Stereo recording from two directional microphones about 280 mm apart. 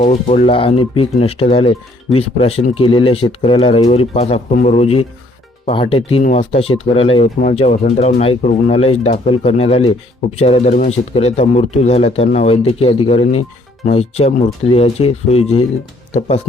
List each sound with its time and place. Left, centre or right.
0.0 s speech: left